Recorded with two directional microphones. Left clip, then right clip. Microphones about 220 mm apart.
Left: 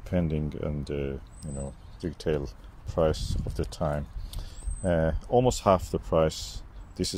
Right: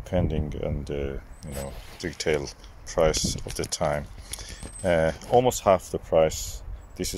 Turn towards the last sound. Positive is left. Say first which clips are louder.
# even
turn(degrees=10)  # may be behind; listen again after turning